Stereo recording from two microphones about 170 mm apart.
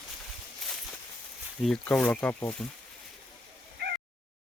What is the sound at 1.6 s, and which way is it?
Speech, 5° left (ahead or behind).